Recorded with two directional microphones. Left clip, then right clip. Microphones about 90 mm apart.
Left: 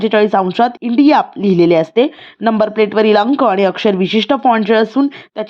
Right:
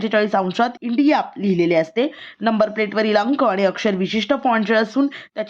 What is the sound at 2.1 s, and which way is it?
Speech, 30° left (ahead or behind).